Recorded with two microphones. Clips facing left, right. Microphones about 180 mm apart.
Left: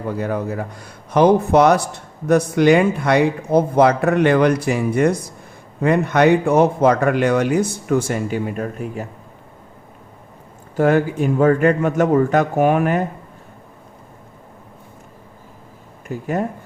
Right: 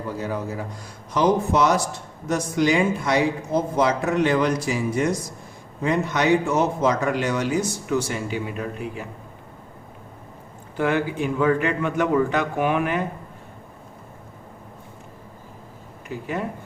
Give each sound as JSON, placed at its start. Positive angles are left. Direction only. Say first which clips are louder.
{"t": 0.1, "sound": "a man's voice", "louder": "left 6 dB", "side_deg": 60}
{"t": 10.8, "sound": "a man's voice", "louder": "left 6 dB", "side_deg": 45}
{"t": 16.0, "sound": "a man's voice", "louder": "left 6 dB", "side_deg": 45}